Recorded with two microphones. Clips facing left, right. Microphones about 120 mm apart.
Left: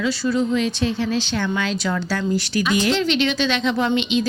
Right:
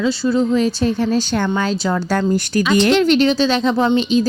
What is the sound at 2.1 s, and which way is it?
Speech, 50° right (ahead or behind).